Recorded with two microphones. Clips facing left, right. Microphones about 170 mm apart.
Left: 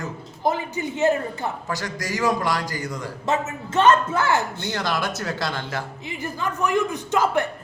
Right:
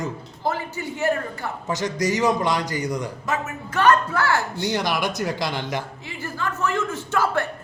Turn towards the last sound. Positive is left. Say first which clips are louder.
# left 2 dB
turn(degrees=20)  # may be behind; listen again after turning